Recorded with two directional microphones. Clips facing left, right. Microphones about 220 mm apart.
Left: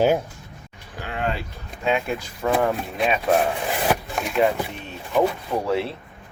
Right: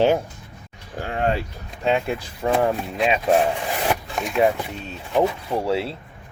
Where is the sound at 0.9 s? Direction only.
40° right (ahead or behind).